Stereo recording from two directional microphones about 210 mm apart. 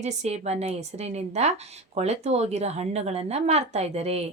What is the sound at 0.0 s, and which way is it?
A woman's voice, 30° right (ahead or behind).